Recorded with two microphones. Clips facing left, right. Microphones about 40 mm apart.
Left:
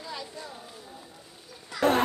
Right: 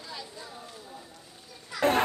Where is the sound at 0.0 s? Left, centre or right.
Centre.